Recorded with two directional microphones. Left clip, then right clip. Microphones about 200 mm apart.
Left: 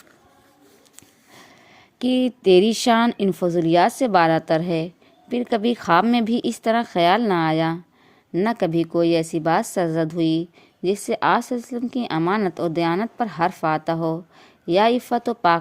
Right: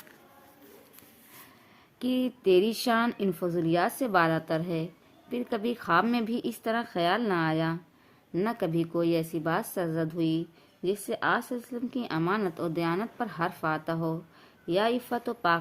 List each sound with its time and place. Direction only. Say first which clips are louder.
2.0 s a woman's voice: left 9 dB; 35° left (ahead or behind)